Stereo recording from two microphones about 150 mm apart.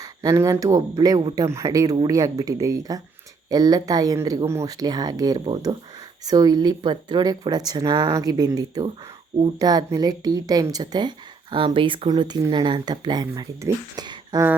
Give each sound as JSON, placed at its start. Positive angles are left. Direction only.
{"t": 0.0, "sound": "speech", "side_deg": -20}